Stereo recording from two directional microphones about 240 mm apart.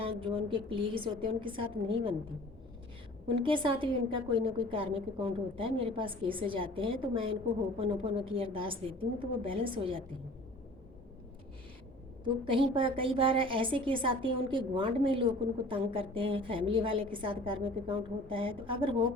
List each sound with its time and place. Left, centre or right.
0.0 s a woman's voice: right
3.2 s a woman's voice: right
12.2 s a woman's voice: right